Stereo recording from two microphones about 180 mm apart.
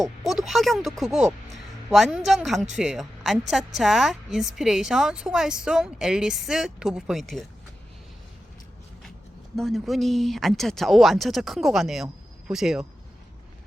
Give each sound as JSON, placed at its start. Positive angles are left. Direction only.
{"t": 0.0, "sound": "a woman's voice", "side_deg": 0}
{"t": 9.6, "sound": "a woman's voice", "side_deg": 0}